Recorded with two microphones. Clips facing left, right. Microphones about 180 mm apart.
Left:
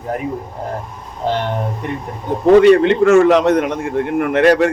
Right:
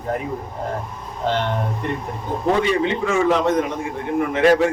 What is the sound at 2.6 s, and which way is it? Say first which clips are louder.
A man's voice: left 10 dB; 65° left (ahead or behind).